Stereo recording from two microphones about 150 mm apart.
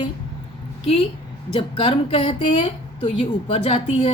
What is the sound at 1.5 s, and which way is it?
A woman's voice, 35° left (ahead or behind).